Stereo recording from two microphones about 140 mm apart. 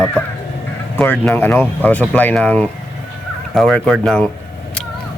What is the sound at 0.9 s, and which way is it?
Speech, 10° left (ahead or behind).